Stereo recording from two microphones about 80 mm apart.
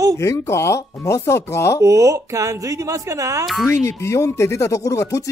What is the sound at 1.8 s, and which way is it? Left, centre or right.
Speech, right.